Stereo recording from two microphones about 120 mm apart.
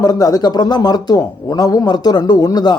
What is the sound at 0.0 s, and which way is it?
Speech, 30° left (ahead or behind).